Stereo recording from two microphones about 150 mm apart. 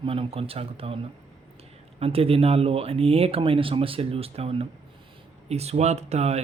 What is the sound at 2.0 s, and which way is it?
Speech, 40° right (ahead or behind).